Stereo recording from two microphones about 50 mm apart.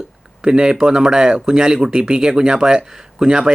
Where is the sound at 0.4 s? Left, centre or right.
Centre.